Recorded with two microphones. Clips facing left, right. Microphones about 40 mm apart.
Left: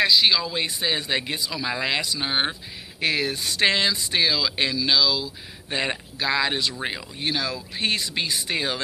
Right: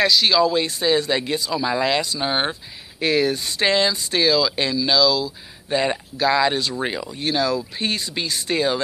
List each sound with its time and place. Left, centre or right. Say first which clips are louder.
0.0 s speech: right 3 dB; left
0.6 s speech: right 6 dB; left
2.1 s speech: right 3 dB; centre
3.0 s speech: right 5 dB; left
4.1 s speech: right 4 dB; left
7.7 s speech: even; left
8.1 s speech: right 2 dB; left